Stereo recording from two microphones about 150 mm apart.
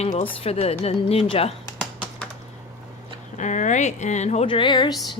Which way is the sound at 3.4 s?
55° left (ahead or behind).